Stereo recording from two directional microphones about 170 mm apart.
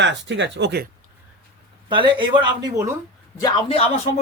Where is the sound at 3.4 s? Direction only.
25° left (ahead or behind).